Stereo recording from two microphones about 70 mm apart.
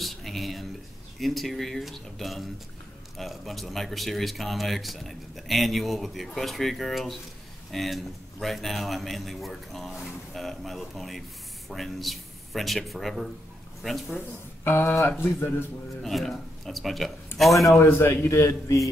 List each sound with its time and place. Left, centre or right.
0.0 s a sound: centre
1.2 s speech: centre
14.6 s a man's voice: left
16.0 s speech: centre
17.7 s a man's voice: left
18.3 s a man's voice: left